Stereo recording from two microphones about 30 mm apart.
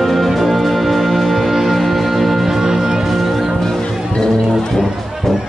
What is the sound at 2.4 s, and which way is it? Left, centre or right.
Music, centre.